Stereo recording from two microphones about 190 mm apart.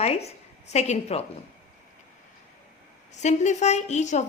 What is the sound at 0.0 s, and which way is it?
A woman's voice, 35° left (ahead or behind).